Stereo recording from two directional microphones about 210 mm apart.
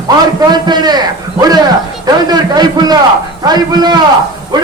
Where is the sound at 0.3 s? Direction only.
20° right (ahead or behind).